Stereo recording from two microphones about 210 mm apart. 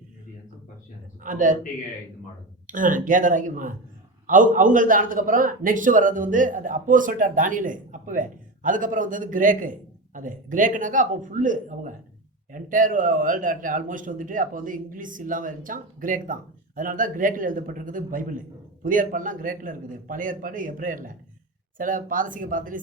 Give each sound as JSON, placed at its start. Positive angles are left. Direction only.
{"t": 1.2, "sound": "a man's voice", "side_deg": -40}
{"t": 2.6, "sound": "a man's voice", "side_deg": -40}